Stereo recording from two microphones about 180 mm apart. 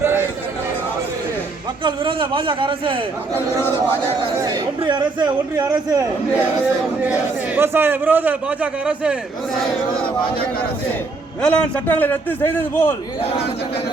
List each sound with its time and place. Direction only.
0.0 s a sound: 10° right (ahead or behind)
1.8 s a man's voice: 30° right (ahead or behind)
3.3 s a man's voice: 15° left (ahead or behind)
4.8 s a man's voice: 25° right (ahead or behind)
7.0 s a man's voice: 10° right (ahead or behind)
11.4 s a man's voice: 10° left (ahead or behind)